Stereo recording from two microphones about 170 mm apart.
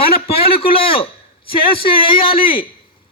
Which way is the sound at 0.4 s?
35° left (ahead or behind).